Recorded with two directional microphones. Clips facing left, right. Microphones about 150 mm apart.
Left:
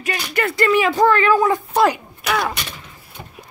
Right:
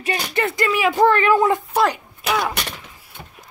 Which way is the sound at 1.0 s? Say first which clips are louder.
Right 1 dB; 20° right (ahead or behind).